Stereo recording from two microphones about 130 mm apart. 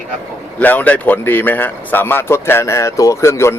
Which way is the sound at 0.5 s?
10° left (ahead or behind).